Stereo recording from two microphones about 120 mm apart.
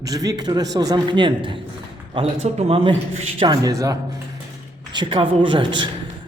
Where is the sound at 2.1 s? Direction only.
65° right (ahead or behind).